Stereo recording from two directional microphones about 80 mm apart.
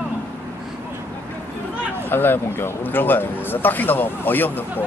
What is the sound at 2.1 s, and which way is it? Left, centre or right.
Speech, left.